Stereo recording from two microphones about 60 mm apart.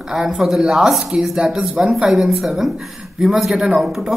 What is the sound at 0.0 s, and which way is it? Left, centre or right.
Speech, centre.